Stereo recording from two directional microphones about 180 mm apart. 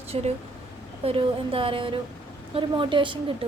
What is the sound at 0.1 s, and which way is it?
A woman's voice, 35° right (ahead or behind).